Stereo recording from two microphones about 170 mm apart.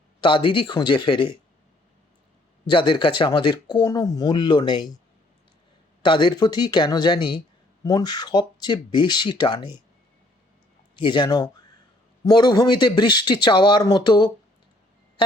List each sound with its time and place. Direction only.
0.2 s speech: 30° left (ahead or behind)
2.6 s speech: 30° left (ahead or behind)
6.0 s speech: 25° left (ahead or behind)
11.0 s speech: 25° left (ahead or behind)